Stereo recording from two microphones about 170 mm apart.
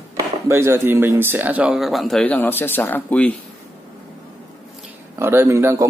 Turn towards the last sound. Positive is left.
turn(degrees=-15)  # may be behind; listen again after turning